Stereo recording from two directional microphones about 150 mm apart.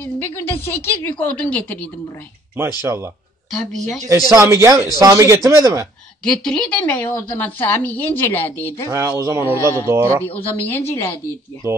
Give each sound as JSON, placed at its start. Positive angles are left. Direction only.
{"t": 0.0, "sound": "a woman's voice", "side_deg": 15}
{"t": 2.8, "sound": "speech", "side_deg": -15}
{"t": 3.5, "sound": "speech", "side_deg": 0}
{"t": 4.1, "sound": "speech", "side_deg": -20}
{"t": 6.2, "sound": "a woman's voice", "side_deg": 5}
{"t": 8.8, "sound": "speech", "side_deg": -20}
{"t": 10.3, "sound": "a woman's voice", "side_deg": 10}